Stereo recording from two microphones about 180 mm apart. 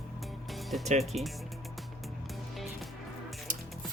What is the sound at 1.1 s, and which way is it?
Speech, 35° right (ahead or behind).